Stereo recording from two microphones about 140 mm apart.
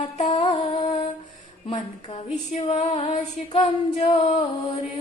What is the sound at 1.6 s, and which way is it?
Speech, 35° left (ahead or behind).